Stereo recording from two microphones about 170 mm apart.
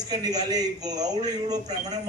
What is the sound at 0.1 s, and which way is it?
A man's voice, 25° right (ahead or behind).